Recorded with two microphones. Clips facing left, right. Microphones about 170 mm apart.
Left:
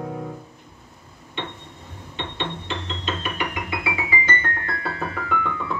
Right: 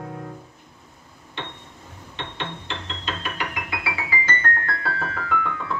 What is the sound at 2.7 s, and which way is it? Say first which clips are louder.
Keyboard: left 3 dB; 20° left (ahead or behind).